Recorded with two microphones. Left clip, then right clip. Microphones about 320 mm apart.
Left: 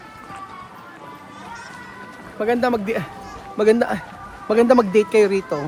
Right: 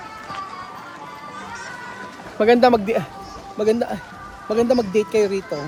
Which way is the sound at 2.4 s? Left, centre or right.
Right.